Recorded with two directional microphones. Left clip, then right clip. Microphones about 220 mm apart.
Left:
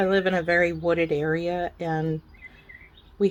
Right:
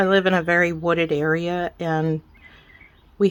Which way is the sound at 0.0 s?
25° right (ahead or behind).